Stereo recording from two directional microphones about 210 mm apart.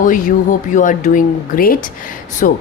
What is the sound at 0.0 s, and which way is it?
Speech, 40° left (ahead or behind).